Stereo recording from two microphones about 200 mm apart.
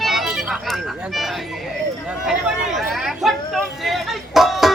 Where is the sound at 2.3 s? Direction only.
Centre (ahead or behind).